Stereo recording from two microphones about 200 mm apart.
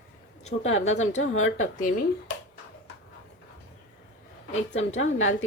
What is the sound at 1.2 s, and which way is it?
Speech, 85° left.